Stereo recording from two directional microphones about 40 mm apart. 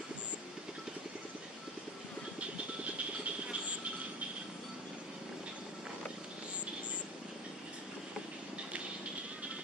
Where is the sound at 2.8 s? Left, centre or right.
Right.